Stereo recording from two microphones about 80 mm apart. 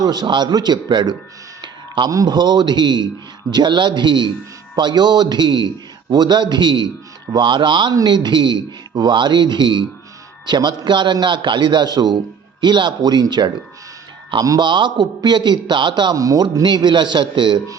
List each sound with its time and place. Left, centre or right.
0.0 s a man's voice: right
2.0 s speech: right
2.3 s a man's voice: right
10.4 s a man's voice: right
12.6 s a man's voice: right
14.6 s a man's voice: right
16.1 s speech: right
16.6 s a man's voice: right